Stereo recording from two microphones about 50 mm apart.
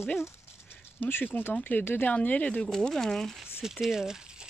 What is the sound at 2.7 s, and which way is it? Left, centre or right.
Speech, centre.